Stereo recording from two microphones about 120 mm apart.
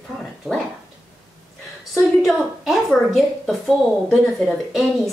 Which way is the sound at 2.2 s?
Centre (ahead or behind).